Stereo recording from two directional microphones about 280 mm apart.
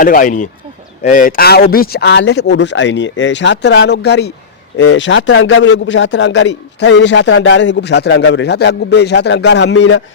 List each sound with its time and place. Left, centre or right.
0.0 s a man's voice: left